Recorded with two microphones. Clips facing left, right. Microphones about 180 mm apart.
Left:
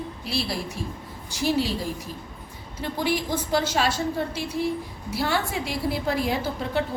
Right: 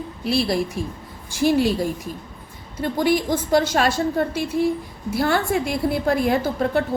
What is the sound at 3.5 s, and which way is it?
A woman's voice, 55° right (ahead or behind).